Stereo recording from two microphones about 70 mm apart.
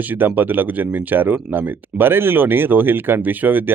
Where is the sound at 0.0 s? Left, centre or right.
Right.